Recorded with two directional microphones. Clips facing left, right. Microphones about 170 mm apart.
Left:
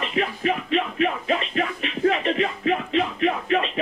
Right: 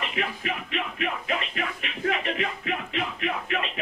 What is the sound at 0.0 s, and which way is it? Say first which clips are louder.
Music: left 6 dB; 35° left (ahead or behind).